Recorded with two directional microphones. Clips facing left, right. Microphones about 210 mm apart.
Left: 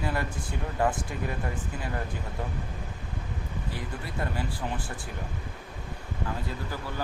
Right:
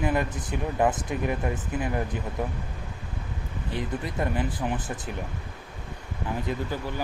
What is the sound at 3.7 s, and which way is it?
Speech, 20° right (ahead or behind).